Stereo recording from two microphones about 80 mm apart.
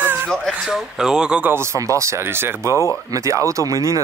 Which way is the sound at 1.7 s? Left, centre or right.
Right.